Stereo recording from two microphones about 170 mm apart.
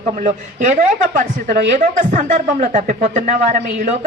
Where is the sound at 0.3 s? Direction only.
40° right (ahead or behind).